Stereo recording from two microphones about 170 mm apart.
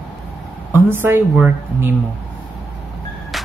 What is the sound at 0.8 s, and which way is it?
A woman's voice, 15° right (ahead or behind).